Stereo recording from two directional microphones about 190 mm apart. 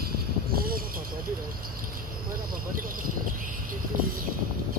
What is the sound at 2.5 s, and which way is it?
Cricket, 50° right (ahead or behind).